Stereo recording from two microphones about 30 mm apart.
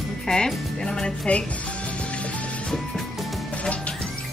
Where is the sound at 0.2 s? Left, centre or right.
Left.